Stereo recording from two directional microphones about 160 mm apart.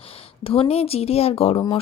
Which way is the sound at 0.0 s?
35° left (ahead or behind).